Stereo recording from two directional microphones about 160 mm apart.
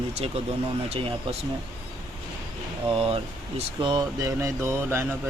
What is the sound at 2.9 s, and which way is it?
Speech, 35° right (ahead or behind).